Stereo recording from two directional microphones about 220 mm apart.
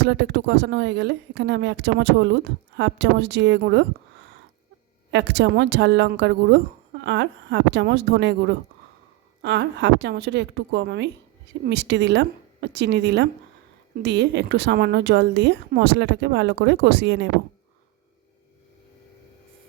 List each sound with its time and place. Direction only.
0.0 s speech: 55° right (ahead or behind)
5.1 s speech: 50° right (ahead or behind)